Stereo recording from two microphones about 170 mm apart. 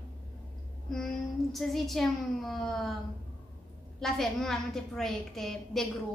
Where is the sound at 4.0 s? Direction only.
Centre (ahead or behind).